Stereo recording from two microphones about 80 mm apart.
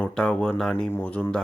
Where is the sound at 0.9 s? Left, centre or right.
Left.